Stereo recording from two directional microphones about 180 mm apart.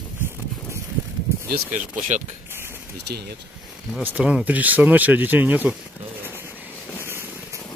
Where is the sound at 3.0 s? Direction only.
65° right (ahead or behind).